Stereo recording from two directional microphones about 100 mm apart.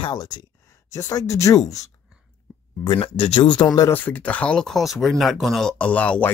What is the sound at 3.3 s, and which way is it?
Speech, 45° left (ahead or behind).